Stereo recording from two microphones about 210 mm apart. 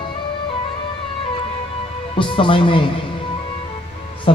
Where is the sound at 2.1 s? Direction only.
25° left (ahead or behind).